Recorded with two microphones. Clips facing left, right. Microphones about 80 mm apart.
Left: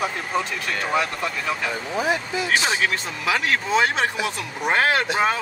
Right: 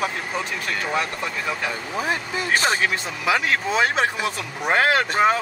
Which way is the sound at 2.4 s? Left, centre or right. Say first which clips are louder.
Right 4 dB; right.